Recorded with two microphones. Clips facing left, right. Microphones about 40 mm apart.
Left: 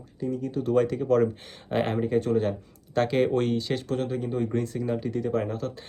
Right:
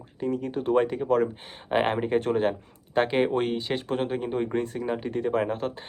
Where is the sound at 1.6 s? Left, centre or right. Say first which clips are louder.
Right 2 dB; right.